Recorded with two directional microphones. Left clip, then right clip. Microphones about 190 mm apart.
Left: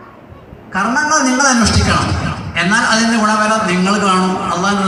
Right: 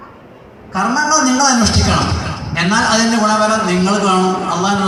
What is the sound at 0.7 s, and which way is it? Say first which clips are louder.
A man's voice: even; 25° left (ahead or behind).